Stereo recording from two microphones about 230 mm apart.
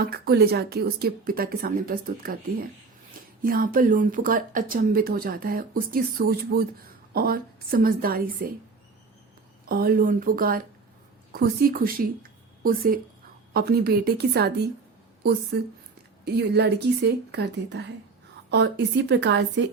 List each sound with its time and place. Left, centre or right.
0.0 s speech: right
9.6 s a woman's voice: right